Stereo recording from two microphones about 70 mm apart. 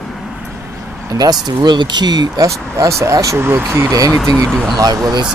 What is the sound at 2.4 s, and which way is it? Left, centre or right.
Speech, right.